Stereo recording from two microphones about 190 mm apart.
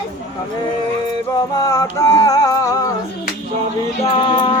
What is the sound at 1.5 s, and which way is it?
Music, 20° left (ahead or behind).